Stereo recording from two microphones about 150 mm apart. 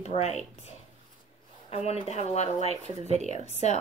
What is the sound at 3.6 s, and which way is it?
Speech, 45° left (ahead or behind).